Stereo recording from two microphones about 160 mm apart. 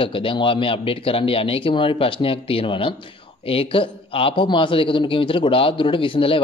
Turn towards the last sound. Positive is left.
turn(degrees=35)  # may be behind; listen again after turning